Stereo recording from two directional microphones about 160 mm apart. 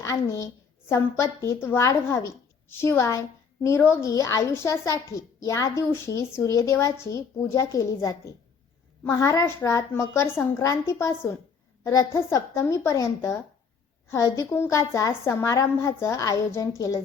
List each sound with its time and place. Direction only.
0.0 s a woman's voice: 20° left (ahead or behind)